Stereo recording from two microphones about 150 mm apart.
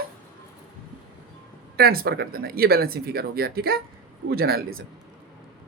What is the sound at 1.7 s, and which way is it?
A woman's voice, 90° right.